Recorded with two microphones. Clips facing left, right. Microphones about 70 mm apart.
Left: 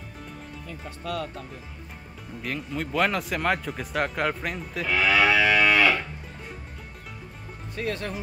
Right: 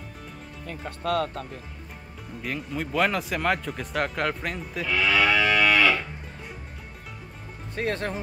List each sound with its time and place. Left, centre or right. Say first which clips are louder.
0.7 s speech: right 6 dB; right
2.4 s speech: even; centre
4.8 s livestock: left 1 dB; centre
7.7 s speech: right 2 dB; right